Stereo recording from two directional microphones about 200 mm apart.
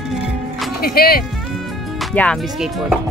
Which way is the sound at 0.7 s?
50° left (ahead or behind).